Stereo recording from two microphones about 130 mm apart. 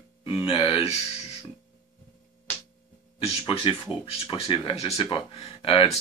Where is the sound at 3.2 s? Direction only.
50° left (ahead or behind).